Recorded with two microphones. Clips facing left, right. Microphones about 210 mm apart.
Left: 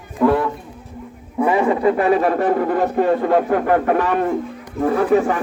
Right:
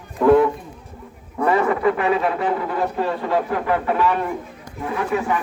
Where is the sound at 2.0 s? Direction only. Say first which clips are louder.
Left 4 dB; 45° left (ahead or behind).